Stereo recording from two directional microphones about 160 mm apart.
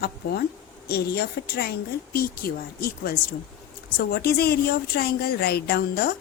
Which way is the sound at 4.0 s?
80° left.